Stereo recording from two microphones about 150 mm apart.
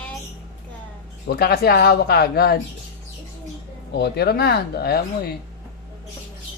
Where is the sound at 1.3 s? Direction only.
90° left.